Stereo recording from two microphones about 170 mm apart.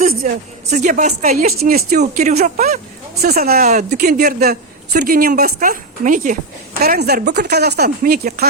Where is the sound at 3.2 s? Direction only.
65° right (ahead or behind).